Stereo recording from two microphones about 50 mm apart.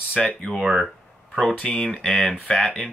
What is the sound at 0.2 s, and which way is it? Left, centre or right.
Speech, centre.